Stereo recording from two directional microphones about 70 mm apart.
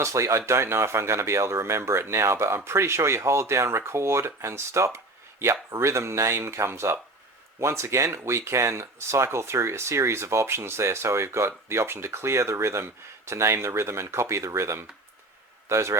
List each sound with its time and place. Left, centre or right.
0.0 s a man's voice: right